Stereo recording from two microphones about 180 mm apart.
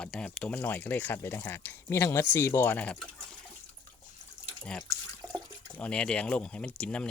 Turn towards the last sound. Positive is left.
turn(degrees=5)  # may be behind; listen again after turning